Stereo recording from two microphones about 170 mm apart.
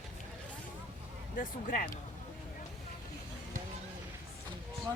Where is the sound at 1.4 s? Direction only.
55° left (ahead or behind).